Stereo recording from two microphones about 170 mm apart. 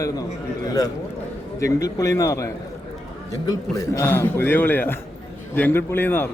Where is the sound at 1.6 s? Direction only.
20° left (ahead or behind).